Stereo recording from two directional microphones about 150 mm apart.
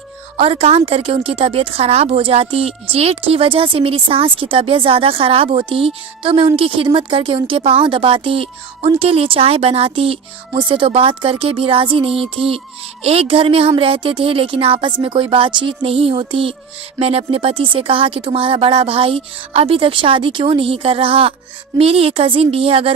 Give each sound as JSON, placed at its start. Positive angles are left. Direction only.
{"t": 0.3, "sound": "a woman's voice", "side_deg": -40}